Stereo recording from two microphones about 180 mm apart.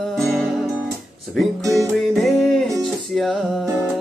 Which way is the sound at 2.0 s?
Centre (ahead or behind).